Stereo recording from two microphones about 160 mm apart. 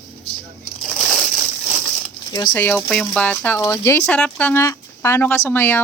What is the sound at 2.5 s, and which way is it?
Speech, 10° left (ahead or behind).